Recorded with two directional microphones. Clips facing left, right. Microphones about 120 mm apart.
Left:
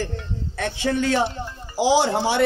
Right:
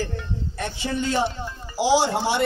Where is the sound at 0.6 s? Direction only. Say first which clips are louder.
Left 5 dB; 90° left.